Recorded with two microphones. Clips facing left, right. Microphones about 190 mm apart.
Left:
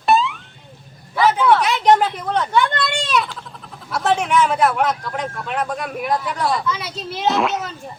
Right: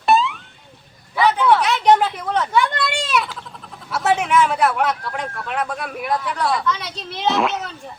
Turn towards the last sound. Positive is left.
turn(degrees=0)  # may be behind; listen again after turning